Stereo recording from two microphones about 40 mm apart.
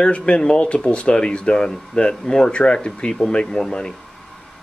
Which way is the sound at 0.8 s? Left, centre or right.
Left.